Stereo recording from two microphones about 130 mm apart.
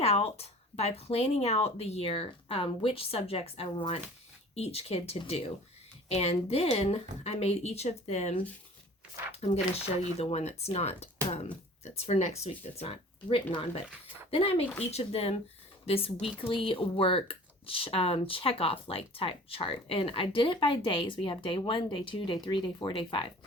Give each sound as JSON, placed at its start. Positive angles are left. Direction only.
{"t": 0.0, "sound": "speech", "side_deg": 50}
{"t": 10.0, "sound": "speech", "side_deg": 55}